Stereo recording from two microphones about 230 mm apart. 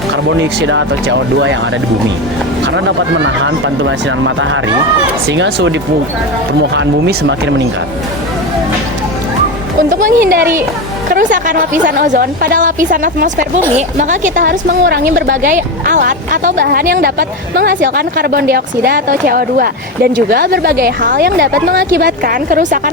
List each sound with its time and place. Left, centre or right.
0.3 s speech: right
3.2 s speech: right
6.7 s speech: right
10.2 s speech: centre
11.1 s a woman's voice: right